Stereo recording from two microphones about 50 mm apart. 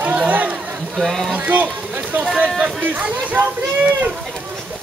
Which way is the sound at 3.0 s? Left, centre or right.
Right.